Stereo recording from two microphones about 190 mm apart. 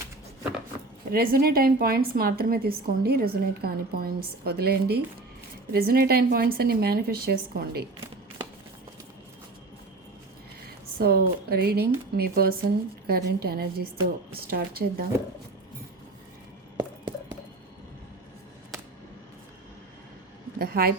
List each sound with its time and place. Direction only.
1.1 s a woman's voice: 50° right (ahead or behind)
10.9 s a woman's voice: 55° right (ahead or behind)
20.6 s a woman's voice: 50° right (ahead or behind)